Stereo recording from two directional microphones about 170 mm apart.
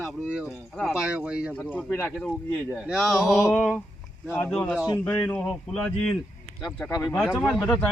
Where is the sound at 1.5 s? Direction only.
10° left (ahead or behind).